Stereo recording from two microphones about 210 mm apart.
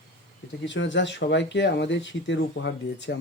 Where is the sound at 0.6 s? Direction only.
60° left (ahead or behind).